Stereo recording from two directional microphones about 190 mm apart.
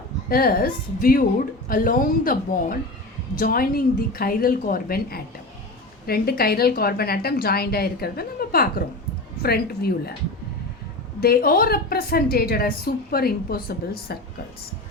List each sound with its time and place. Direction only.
0.3 s a woman's voice: 50° left (ahead or behind)
11.2 s a woman's voice: 50° left (ahead or behind)